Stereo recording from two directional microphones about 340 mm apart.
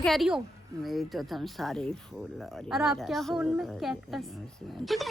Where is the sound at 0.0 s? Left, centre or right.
Centre.